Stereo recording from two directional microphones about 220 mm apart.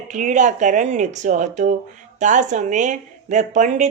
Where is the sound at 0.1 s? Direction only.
35° right (ahead or behind).